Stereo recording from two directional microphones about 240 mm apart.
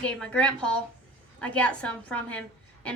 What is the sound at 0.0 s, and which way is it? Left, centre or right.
A woman's voice, centre.